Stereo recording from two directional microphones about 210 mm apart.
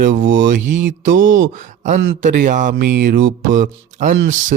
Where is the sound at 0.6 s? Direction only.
60° right (ahead or behind).